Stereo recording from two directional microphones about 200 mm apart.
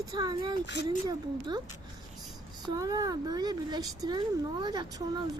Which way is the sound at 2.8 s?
20° right (ahead or behind).